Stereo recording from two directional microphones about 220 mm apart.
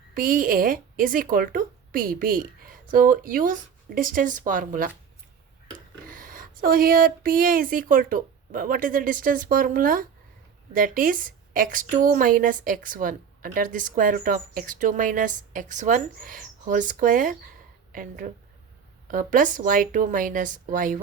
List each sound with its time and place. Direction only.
0.1 s a woman's voice: 40° right (ahead or behind)
6.1 s a woman's voice: 40° right (ahead or behind)